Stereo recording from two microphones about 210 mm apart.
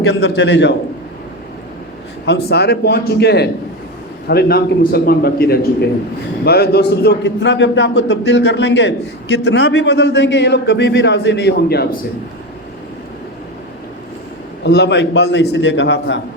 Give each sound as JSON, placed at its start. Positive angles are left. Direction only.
{"t": 0.0, "sound": "a man's voice", "side_deg": 50}
{"t": 2.2, "sound": "a man's voice", "side_deg": 55}
{"t": 14.6, "sound": "a man's voice", "side_deg": 50}